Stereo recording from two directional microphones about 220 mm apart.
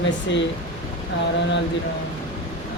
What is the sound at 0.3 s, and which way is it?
Speech, 55° left (ahead or behind).